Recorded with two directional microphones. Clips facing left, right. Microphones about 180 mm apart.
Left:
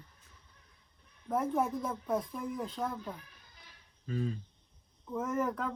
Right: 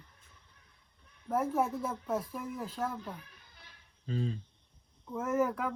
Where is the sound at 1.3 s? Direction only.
5° right (ahead or behind).